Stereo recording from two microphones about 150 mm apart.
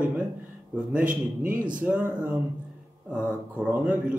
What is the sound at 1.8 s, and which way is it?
Speech, 10° right (ahead or behind).